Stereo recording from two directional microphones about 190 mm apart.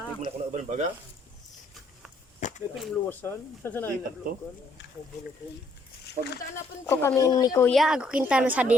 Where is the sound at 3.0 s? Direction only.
10° left (ahead or behind).